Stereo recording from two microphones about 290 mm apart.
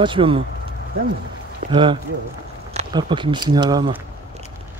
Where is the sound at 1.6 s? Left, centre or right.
Centre.